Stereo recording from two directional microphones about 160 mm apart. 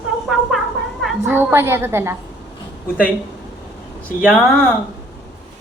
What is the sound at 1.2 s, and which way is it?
Speech, 15° right (ahead or behind).